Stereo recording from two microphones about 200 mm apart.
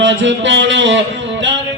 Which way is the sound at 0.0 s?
70° right (ahead or behind).